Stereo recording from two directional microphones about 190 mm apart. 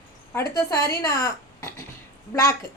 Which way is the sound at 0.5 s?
15° left (ahead or behind).